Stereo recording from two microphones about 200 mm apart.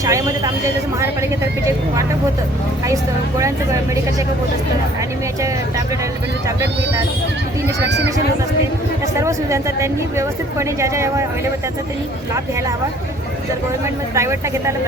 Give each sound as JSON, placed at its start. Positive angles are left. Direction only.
{"t": 0.0, "sound": "speech", "side_deg": -15}
{"t": 2.8, "sound": "speech", "side_deg": -15}
{"t": 7.9, "sound": "speech", "side_deg": -60}
{"t": 9.2, "sound": "speech", "side_deg": -15}
{"t": 14.2, "sound": "speech", "side_deg": -15}